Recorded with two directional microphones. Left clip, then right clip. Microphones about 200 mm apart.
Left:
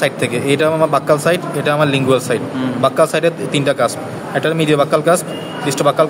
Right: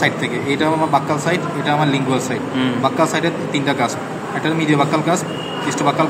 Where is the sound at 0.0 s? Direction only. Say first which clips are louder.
Left 2 dB; 60° left (ahead or behind).